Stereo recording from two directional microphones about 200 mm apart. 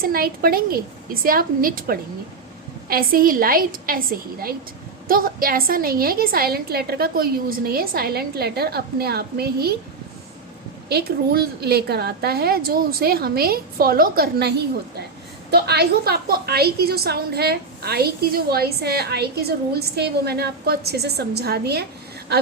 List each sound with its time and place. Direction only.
0.0 s a woman's voice: 50° right (ahead or behind)
10.8 s a woman's voice: 50° right (ahead or behind)